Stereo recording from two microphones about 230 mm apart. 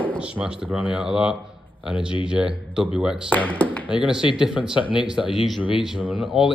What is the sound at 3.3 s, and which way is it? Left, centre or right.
Speech, centre.